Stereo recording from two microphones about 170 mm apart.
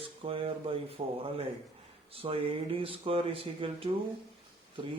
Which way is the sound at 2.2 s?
35° right (ahead or behind).